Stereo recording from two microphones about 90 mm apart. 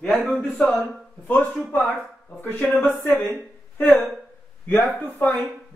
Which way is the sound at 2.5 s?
15° left (ahead or behind).